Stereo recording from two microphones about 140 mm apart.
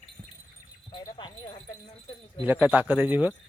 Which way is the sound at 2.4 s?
10° right (ahead or behind).